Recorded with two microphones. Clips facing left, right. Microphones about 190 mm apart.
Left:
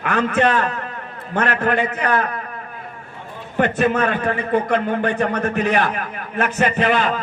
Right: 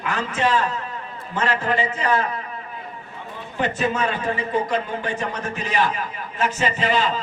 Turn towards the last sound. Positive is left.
turn(degrees=55)  # may be behind; listen again after turning